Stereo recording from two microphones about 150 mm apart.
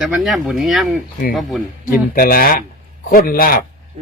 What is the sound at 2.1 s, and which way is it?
A man's voice, 75° left (ahead or behind).